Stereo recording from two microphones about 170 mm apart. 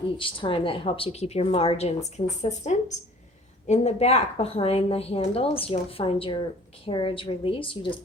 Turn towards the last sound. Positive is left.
turn(degrees=30)  # may be behind; listen again after turning